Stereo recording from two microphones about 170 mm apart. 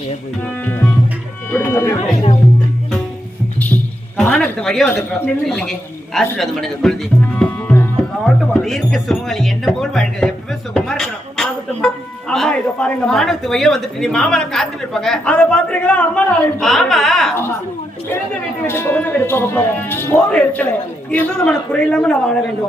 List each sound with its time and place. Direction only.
0.4 s music: 10° left (ahead or behind)
4.2 s a woman's voice: 5° left (ahead or behind)
10.8 s a sound: 5° left (ahead or behind)
12.3 s a woman's voice: 5° left (ahead or behind)
18.6 s a woman's voice: 15° left (ahead or behind)